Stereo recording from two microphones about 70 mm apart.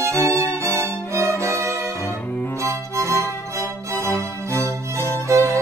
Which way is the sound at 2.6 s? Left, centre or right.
Right.